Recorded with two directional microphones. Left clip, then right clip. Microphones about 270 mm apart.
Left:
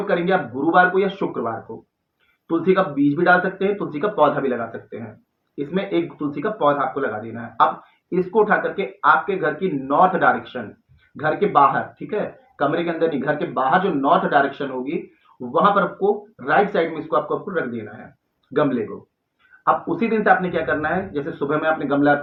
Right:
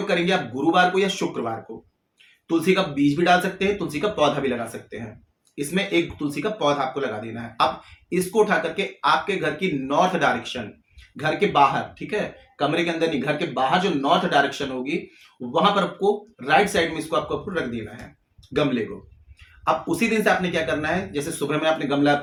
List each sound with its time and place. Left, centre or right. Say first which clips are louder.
0.1 s speech: left 2 dB; right
2.5 s speech: left 2 dB; right
8.1 s speech: left 2 dB; right
19.6 s speech: left 3 dB; right